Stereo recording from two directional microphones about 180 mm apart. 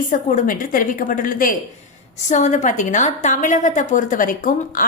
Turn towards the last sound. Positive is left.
turn(degrees=50)  # may be behind; listen again after turning